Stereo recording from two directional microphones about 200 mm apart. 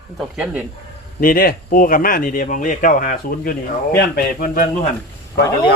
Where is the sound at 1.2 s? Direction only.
45° left (ahead or behind).